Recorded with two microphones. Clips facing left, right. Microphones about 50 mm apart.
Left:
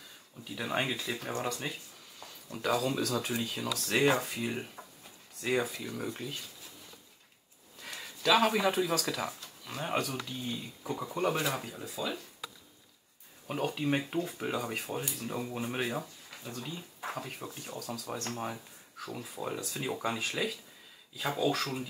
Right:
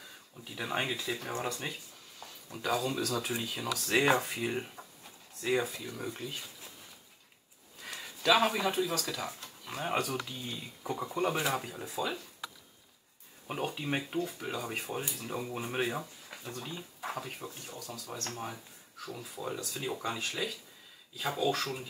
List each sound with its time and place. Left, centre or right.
0.6 s speech: centre
5.4 s speech: centre
7.8 s a sound: centre
9.8 s speech: centre
11.1 s speech: centre
13.5 s speech: centre
14.1 s speech: centre
14.6 s speech: centre
17.5 s speech: left
18.1 s speech: centre